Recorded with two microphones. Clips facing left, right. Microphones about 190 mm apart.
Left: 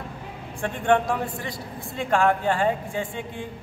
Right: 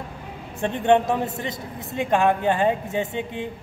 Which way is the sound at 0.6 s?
20° right (ahead or behind).